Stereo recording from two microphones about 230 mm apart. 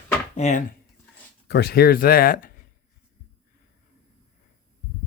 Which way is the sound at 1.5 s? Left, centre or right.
Left.